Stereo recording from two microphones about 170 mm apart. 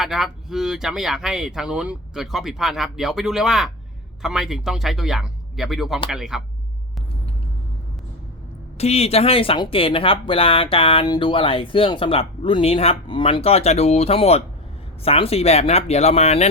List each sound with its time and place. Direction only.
0.0 s speech: centre (ahead or behind)
8.8 s speech: 40° left (ahead or behind)